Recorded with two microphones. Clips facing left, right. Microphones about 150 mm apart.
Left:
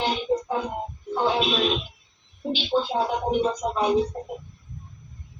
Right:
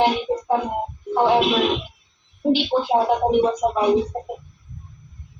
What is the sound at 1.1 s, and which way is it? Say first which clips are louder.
Speech: right 6 dB; 65° right (ahead or behind).